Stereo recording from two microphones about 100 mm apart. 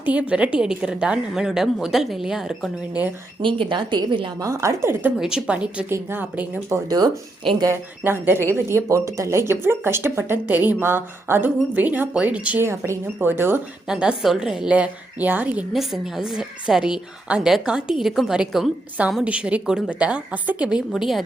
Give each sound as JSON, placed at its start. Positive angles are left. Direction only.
{"t": 0.0, "sound": "a woman's voice", "side_deg": -15}
{"t": 3.4, "sound": "a woman's voice", "side_deg": -55}
{"t": 4.4, "sound": "speech", "side_deg": -30}
{"t": 5.2, "sound": "speech", "side_deg": -10}
{"t": 6.8, "sound": "speech", "side_deg": -40}
{"t": 7.6, "sound": "speech", "side_deg": -25}
{"t": 12.6, "sound": "speech", "side_deg": -25}
{"t": 13.8, "sound": "speech", "side_deg": -10}
{"t": 15.7, "sound": "a woman's voice", "side_deg": 0}